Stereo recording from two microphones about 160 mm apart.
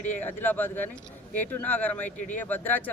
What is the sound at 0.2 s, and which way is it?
Speech, 10° left (ahead or behind).